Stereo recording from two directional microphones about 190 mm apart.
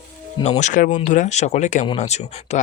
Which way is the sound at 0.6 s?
40° left (ahead or behind).